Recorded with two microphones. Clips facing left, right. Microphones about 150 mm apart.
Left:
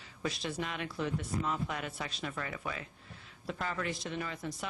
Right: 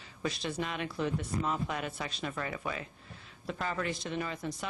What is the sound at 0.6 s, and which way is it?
Speech, 25° right (ahead or behind).